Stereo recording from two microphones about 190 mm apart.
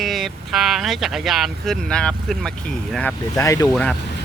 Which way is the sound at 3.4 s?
15° left (ahead or behind).